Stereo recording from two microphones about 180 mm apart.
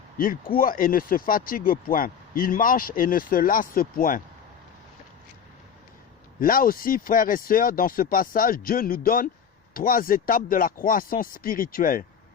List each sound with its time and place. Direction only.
0.2 s speech: 50° left (ahead or behind)
6.4 s speech: 50° left (ahead or behind)